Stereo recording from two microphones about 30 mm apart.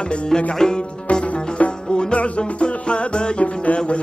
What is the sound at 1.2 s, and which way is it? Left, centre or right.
Music, left.